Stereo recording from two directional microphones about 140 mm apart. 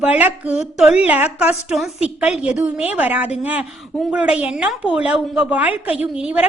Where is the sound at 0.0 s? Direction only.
10° right (ahead or behind).